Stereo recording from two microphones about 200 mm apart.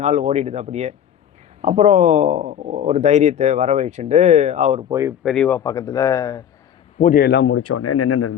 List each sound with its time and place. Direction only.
0.0 s speech: 35° right (ahead or behind)
4.9 s speech: 15° right (ahead or behind)
5.2 s speech: 5° left (ahead or behind)
7.0 s a man's voice: 45° left (ahead or behind); by 7.6 s 70° left (ahead or behind)